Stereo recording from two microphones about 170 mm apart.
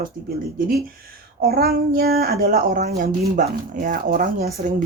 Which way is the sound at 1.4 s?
65° right (ahead or behind).